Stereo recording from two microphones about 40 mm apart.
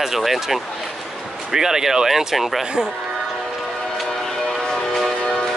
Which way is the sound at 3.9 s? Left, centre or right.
Centre.